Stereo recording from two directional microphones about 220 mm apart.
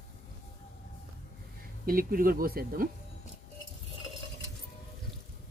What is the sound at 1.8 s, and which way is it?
Speech, 40° right (ahead or behind).